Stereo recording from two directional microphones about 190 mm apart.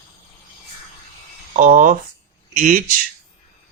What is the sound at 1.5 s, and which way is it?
Speech, 45° right (ahead or behind).